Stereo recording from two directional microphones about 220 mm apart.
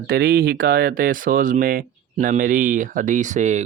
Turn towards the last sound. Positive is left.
turn(degrees=-35)  # may be behind; listen again after turning